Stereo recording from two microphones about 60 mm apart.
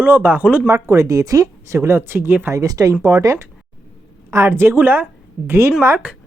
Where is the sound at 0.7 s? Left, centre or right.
Right.